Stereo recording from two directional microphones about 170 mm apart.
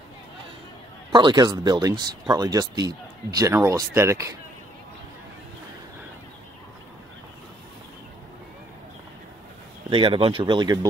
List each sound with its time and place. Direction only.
1.1 s speech: 25° right (ahead or behind)
9.8 s speech: 30° right (ahead or behind)